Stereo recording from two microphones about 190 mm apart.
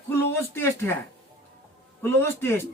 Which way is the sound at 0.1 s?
10° left (ahead or behind).